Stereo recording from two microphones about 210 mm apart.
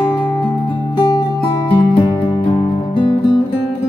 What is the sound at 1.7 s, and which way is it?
Music, 25° left (ahead or behind).